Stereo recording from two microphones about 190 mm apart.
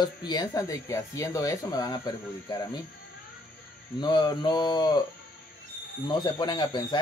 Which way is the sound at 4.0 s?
20° left (ahead or behind).